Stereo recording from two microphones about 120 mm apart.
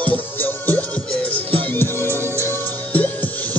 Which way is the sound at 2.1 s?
20° right (ahead or behind).